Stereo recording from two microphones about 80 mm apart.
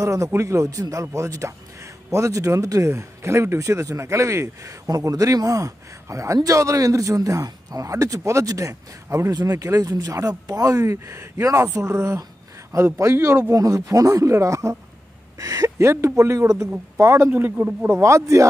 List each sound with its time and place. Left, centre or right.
0.0 s a man's voice: right
13.0 s a man's voice: right
17.0 s speech: right